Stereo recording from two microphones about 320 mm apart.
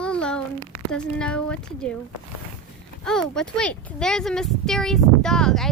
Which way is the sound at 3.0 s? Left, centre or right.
Centre.